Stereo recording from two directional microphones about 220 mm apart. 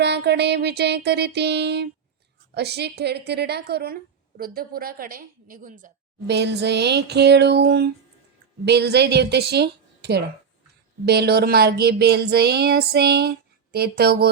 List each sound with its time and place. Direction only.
0.0 s a woman's voice: 50° right (ahead or behind)
6.2 s a woman's voice: 50° right (ahead or behind)